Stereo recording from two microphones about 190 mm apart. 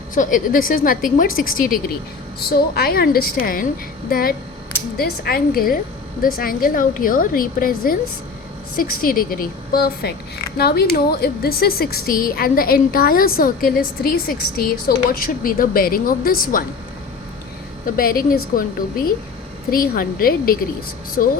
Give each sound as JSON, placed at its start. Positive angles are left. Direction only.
{"t": 0.1, "sound": "a woman's voice", "side_deg": 45}
{"t": 17.8, "sound": "a woman's voice", "side_deg": 50}